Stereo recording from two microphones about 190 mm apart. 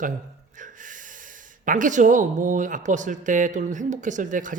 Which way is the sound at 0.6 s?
45° right (ahead or behind).